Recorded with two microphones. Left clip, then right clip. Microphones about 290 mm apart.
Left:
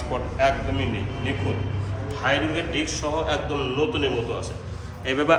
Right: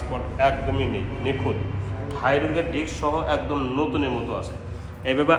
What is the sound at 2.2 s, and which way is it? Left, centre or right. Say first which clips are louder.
A man's voice: right 2 dB; centre.